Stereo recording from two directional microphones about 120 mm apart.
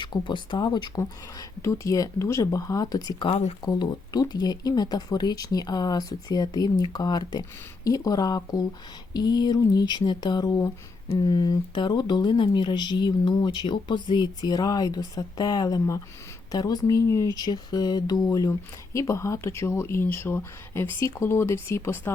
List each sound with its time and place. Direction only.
0.0 s speech: 40° left (ahead or behind)
3.2 s speech: 55° left (ahead or behind)
3.6 s speech: 35° left (ahead or behind)